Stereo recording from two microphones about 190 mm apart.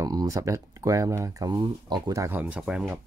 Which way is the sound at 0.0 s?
20° right (ahead or behind).